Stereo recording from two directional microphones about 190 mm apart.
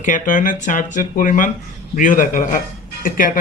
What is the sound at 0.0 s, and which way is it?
Speech, 45° left (ahead or behind).